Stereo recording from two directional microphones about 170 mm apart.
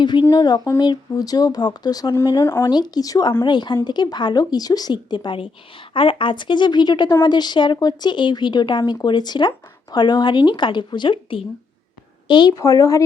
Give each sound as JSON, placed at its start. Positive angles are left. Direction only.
{"t": 0.0, "sound": "a woman's voice", "side_deg": 25}
{"t": 2.4, "sound": "speech", "side_deg": 15}
{"t": 2.6, "sound": "a woman's voice", "side_deg": 25}